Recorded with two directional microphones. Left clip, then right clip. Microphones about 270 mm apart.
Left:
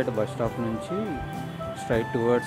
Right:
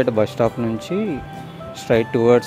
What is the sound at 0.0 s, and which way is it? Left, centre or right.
Speech, right.